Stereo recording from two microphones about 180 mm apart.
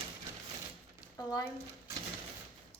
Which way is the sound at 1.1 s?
20° left (ahead or behind).